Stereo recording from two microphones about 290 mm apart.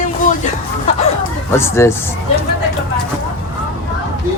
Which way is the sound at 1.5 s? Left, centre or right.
Centre.